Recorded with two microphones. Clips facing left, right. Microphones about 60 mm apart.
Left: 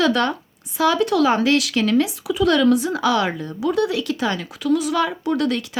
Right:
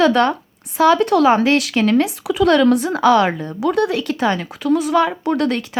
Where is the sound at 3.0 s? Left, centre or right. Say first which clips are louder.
Right 10 dB; right.